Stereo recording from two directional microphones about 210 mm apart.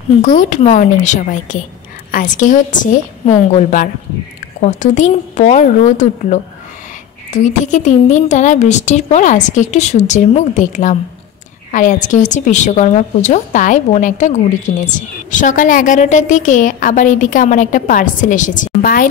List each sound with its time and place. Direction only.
0.2 s a woman's voice: 40° left (ahead or behind)